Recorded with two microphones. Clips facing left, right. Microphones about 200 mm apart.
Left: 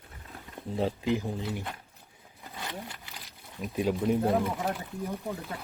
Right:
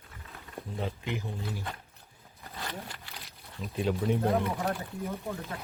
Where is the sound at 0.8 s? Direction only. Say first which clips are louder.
Left 7 dB; 35° left (ahead or behind).